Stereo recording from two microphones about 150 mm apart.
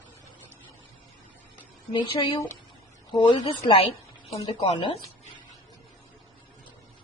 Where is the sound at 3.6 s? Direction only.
35° left (ahead or behind).